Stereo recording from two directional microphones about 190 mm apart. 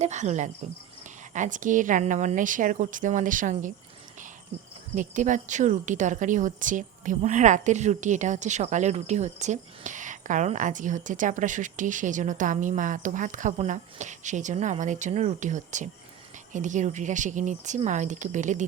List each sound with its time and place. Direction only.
0.0 s speech: 40° right (ahead or behind)
4.9 s speech: 40° right (ahead or behind)